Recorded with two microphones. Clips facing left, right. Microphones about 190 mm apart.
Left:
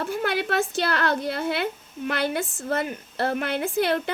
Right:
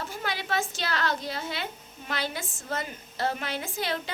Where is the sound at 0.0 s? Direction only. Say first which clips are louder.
Left 8 dB; 60° left (ahead or behind).